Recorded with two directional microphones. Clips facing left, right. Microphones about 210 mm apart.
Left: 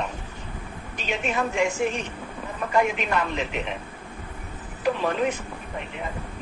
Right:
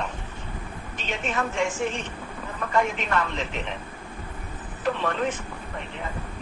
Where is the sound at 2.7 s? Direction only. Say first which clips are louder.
Left 2 dB; 15° left (ahead or behind).